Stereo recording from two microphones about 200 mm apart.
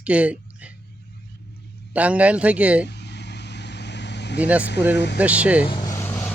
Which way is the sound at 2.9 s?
60° left (ahead or behind).